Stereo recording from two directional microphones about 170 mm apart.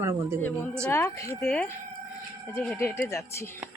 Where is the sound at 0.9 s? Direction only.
15° left (ahead or behind).